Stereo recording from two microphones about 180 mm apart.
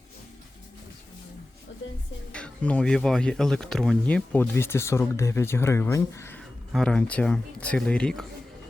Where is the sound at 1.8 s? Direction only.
90° left.